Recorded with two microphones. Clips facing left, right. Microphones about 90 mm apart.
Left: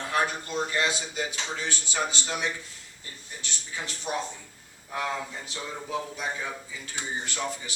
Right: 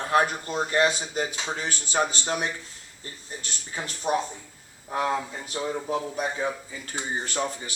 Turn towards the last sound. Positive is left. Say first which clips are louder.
# right 3 dB
turn(degrees=-35)  # may be behind; listen again after turning